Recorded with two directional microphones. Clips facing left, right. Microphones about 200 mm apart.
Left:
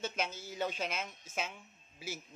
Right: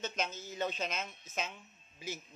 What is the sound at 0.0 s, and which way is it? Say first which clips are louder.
Speech: even; 10° left (ahead or behind).